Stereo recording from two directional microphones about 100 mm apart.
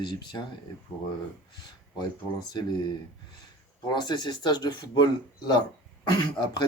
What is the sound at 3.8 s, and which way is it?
Speech, 45° left (ahead or behind).